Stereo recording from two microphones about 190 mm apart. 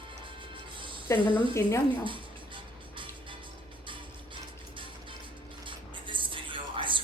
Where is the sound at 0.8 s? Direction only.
25° right (ahead or behind).